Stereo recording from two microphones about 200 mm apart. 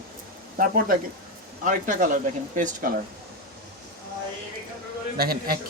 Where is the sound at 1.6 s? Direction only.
40° right (ahead or behind).